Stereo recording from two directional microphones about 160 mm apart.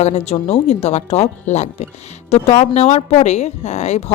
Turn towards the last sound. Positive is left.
turn(degrees=45)  # may be behind; listen again after turning